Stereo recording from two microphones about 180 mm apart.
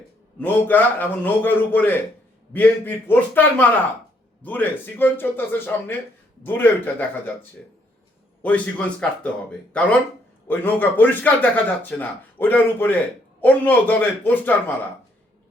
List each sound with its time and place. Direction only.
0.3 s a man's voice: 10° left (ahead or behind)
8.4 s a man's voice: 10° left (ahead or behind)